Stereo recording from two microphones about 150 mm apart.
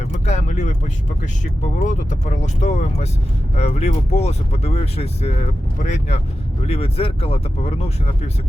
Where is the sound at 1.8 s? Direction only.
55° left (ahead or behind).